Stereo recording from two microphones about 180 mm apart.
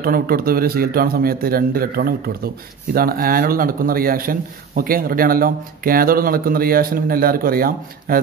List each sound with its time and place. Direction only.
0.0 s speech: 55° right (ahead or behind)